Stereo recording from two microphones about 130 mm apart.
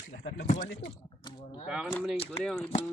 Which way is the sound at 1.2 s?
40° left (ahead or behind).